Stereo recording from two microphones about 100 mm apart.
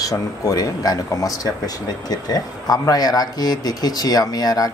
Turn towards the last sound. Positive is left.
turn(degrees=40)  # may be behind; listen again after turning